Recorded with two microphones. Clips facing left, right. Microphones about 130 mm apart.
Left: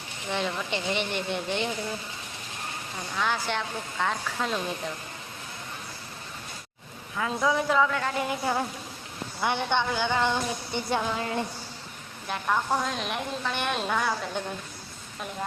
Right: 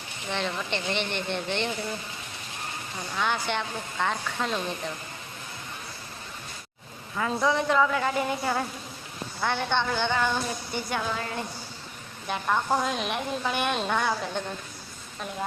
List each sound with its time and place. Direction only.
0.3 s speech: 10° left (ahead or behind)
3.2 s a woman's voice: centre (ahead or behind)
7.2 s a woman's voice: centre (ahead or behind)
9.4 s speech: 15° left (ahead or behind)
10.2 s a sound: 20° left (ahead or behind)
12.3 s a woman's voice: centre (ahead or behind)